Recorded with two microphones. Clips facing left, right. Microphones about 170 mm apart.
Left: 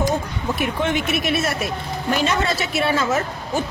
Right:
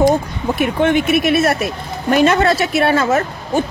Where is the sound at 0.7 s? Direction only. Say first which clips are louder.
Right 7 dB; 60° right (ahead or behind).